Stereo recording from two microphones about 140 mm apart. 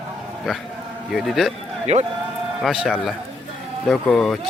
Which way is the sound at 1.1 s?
Centre (ahead or behind).